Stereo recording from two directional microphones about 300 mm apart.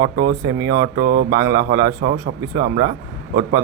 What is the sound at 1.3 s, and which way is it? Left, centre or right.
Speech, centre.